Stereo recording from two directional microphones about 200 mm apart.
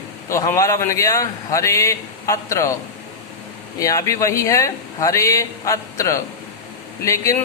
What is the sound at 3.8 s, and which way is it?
A man's voice, 15° left (ahead or behind).